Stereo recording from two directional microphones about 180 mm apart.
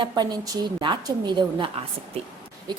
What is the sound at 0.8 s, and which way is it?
A woman's voice, 25° right (ahead or behind).